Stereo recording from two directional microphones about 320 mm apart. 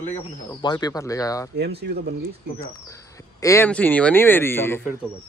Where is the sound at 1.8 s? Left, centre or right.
Right.